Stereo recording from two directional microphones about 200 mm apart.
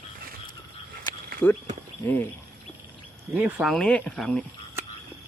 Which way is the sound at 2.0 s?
10° left (ahead or behind).